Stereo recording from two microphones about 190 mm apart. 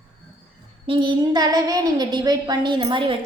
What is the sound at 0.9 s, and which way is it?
A woman's voice, 25° right (ahead or behind).